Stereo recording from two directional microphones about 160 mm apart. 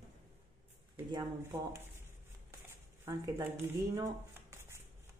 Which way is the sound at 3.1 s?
15° right (ahead or behind).